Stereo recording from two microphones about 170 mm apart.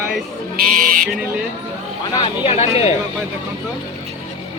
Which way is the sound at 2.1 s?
30° left (ahead or behind).